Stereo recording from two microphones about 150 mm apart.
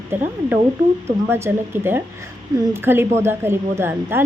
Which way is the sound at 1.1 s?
15° right (ahead or behind).